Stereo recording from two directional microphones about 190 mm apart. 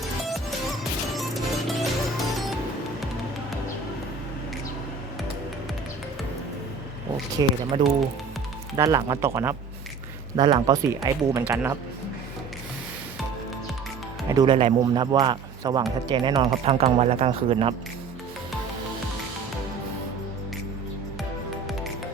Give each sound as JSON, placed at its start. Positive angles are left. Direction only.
{"t": 1.1, "sound": "music", "side_deg": 0}
{"t": 7.3, "sound": "speech", "side_deg": -25}
{"t": 14.3, "sound": "speech", "side_deg": -20}